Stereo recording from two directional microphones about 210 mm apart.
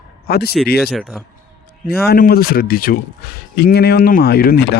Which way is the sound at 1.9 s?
45° left (ahead or behind).